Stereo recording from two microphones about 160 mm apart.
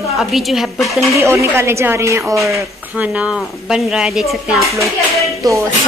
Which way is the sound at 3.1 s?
Centre (ahead or behind).